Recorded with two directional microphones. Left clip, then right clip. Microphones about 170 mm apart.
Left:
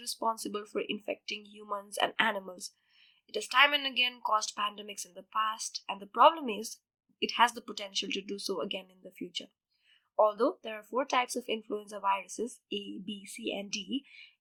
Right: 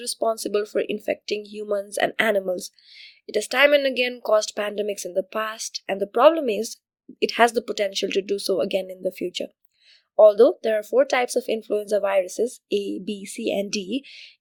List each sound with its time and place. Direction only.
0.0 s speech: 35° right (ahead or behind)